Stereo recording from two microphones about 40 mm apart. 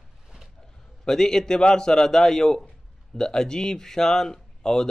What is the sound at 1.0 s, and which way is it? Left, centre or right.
Speech, centre.